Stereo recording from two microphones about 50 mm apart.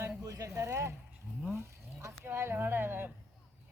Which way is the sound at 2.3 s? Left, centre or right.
Right.